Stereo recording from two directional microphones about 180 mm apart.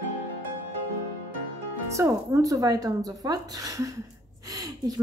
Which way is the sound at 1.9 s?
15° right (ahead or behind).